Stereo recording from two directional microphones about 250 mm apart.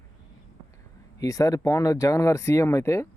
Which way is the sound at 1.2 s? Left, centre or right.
Centre.